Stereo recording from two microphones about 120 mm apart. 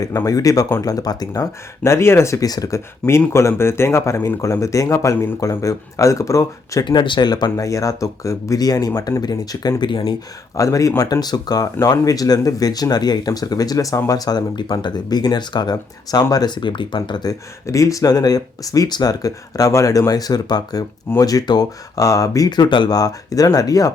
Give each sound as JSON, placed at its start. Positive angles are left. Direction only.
{"t": 0.3, "sound": "speech", "side_deg": 30}
{"t": 6.8, "sound": "speech", "side_deg": 40}
{"t": 10.6, "sound": "speech", "side_deg": 25}
{"t": 17.7, "sound": "speech", "side_deg": 25}